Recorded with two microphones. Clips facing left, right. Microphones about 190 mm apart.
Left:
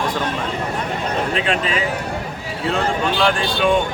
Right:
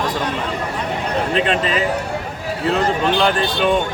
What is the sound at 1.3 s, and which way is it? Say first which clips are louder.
Speech: right 3 dB; centre (ahead or behind).